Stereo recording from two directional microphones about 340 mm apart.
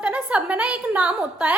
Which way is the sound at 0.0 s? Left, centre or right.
Centre.